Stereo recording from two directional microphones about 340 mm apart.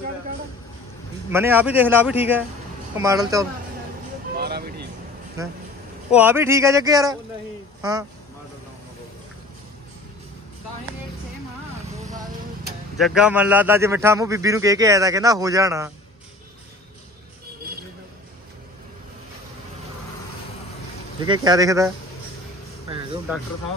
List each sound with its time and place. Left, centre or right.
1.3 s a man's voice: centre
4.4 s music: right
6.1 s a man's voice: centre
13.0 s a man's voice: centre
21.2 s a man's voice: centre